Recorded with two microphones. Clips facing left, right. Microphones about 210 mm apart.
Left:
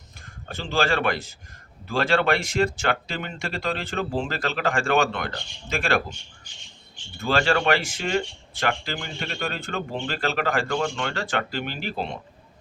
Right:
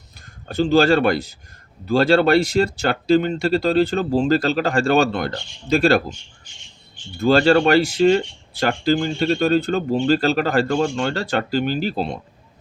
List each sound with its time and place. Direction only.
0.4 s speech: 40° right (ahead or behind)
7.2 s speech: 40° right (ahead or behind)